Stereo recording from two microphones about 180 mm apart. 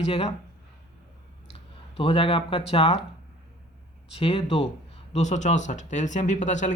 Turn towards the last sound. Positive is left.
turn(degrees=40)  # may be behind; listen again after turning